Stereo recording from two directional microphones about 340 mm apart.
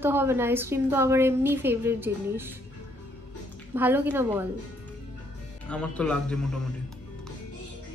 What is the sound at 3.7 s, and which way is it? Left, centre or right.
Speech, centre.